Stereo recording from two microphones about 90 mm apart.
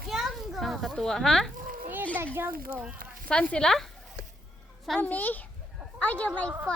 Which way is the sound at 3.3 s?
10° left (ahead or behind).